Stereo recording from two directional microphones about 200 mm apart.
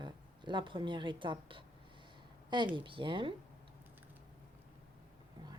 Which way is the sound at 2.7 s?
25° right (ahead or behind).